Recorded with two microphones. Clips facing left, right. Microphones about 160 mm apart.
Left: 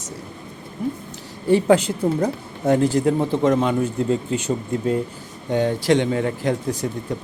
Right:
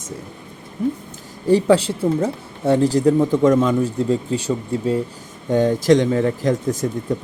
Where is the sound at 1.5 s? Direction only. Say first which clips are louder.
Right 1 dB; 35° right (ahead or behind).